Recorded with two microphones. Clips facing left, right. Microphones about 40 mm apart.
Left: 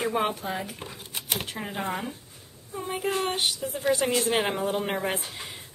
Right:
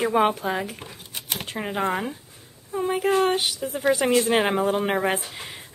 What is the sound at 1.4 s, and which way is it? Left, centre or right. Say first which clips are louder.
Speech: right 6 dB; right.